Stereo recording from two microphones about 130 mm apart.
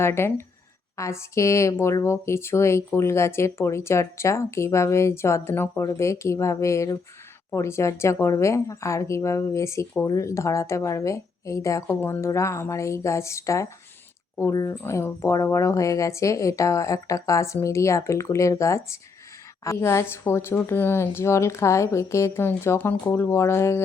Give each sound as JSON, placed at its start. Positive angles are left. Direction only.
{"t": 0.0, "sound": "speech", "side_deg": 20}